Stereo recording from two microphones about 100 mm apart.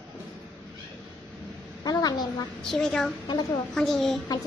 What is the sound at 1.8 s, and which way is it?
Speech, 40° left (ahead or behind).